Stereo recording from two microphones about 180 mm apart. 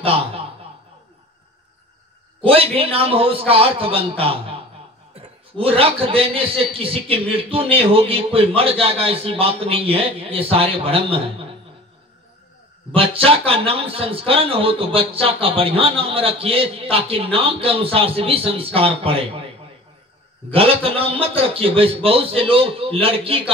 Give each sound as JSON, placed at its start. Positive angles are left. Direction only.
{"t": 0.0, "sound": "chuckle", "side_deg": -30}
{"t": 2.4, "sound": "a man's voice", "side_deg": -30}
{"t": 12.9, "sound": "a man's voice", "side_deg": -30}
{"t": 20.5, "sound": "a man's voice", "side_deg": -30}